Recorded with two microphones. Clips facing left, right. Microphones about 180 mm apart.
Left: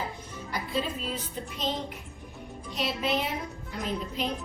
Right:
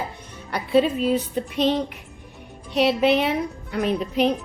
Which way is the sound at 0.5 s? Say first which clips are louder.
Right 12 dB; 70° right (ahead or behind).